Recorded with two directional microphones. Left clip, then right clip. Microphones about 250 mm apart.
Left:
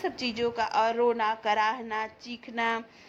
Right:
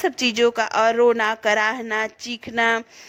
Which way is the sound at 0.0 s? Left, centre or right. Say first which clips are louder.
Right 11 dB; right.